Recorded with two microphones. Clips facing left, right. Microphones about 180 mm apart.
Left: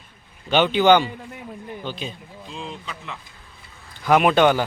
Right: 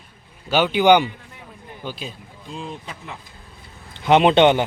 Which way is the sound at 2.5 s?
40° right (ahead or behind).